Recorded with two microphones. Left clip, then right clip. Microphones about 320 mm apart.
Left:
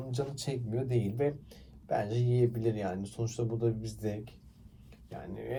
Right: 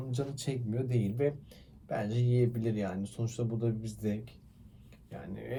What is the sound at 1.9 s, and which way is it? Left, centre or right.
Speech, left.